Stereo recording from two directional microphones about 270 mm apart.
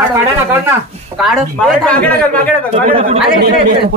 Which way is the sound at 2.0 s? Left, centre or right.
Centre.